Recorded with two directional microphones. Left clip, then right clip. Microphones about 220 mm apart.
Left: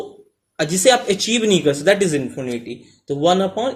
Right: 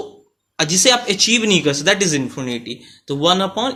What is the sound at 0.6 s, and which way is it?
Speech, 15° right (ahead or behind).